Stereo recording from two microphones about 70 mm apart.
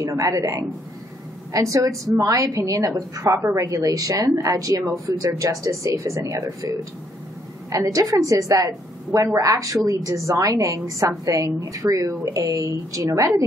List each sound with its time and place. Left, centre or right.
0.1 s a woman's voice: right